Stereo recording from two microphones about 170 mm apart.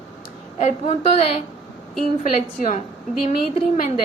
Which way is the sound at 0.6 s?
40° left (ahead or behind).